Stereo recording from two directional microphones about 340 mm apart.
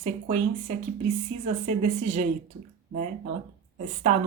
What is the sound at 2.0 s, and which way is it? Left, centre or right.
Speech, right.